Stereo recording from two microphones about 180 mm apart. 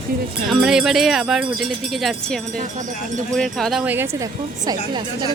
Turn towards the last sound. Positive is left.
turn(degrees=-20)  # may be behind; listen again after turning